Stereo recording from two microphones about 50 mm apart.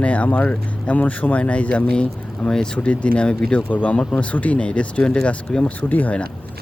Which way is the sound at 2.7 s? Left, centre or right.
Left.